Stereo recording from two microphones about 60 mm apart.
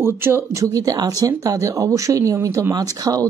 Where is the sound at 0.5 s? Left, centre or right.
Right.